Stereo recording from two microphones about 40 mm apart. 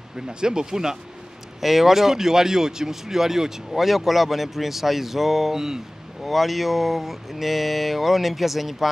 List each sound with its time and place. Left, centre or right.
0.3 s speech: centre